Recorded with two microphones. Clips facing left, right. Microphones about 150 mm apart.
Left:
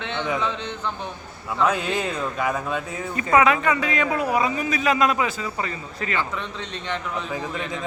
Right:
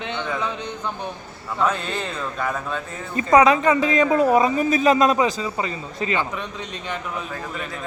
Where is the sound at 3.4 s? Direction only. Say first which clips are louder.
Right 4 dB; 30° right (ahead or behind); by 6.9 s 10° right (ahead or behind).